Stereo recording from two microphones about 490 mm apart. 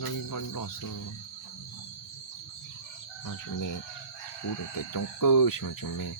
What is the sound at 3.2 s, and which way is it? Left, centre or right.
Speech, left.